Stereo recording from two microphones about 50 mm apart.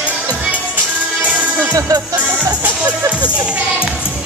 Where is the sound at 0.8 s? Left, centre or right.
Right.